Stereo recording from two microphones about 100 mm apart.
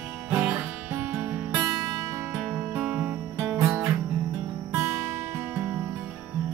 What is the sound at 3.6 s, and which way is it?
Music, 10° right (ahead or behind).